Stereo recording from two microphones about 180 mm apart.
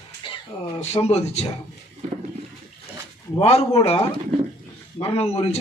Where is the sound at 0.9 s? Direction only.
35° left (ahead or behind).